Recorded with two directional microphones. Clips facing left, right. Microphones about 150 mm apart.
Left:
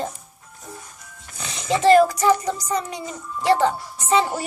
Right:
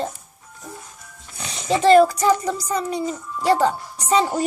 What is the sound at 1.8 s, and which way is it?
A child's voice, 35° right (ahead or behind).